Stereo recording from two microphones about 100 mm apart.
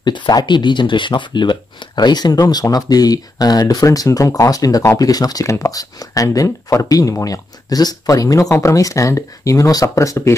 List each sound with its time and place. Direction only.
0.0 s speech: 50° left (ahead or behind); by 10.3 s 30° left (ahead or behind)